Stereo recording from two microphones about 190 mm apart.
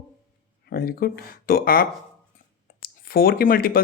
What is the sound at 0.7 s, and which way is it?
Speech, 50° left (ahead or behind).